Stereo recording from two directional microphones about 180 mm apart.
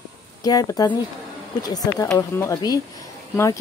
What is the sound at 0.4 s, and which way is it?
Speech, 20° left (ahead or behind).